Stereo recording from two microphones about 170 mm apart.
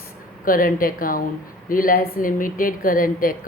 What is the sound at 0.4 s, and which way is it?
A woman's voice, 55° left (ahead or behind).